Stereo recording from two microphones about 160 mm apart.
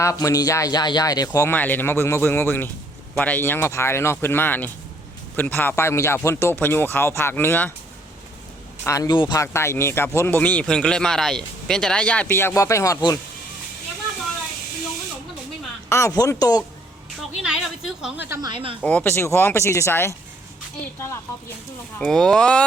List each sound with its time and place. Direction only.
0.0 s speech: 20° left (ahead or behind)
8.8 s speech: 20° left (ahead or behind)
15.9 s speech: 20° left (ahead or behind)
17.4 s a woman's voice: 5° right (ahead or behind)
18.3 s speech: 30° right (ahead or behind)
18.8 s speech: 10° left (ahead or behind)
21.9 s a woman's voice: 5° left (ahead or behind)